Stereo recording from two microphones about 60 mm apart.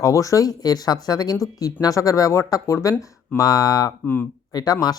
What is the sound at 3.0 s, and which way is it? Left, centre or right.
Speech, left.